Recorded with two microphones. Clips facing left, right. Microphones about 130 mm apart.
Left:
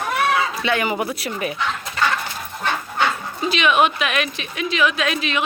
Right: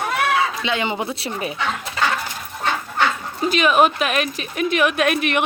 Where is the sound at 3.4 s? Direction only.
45° right (ahead or behind).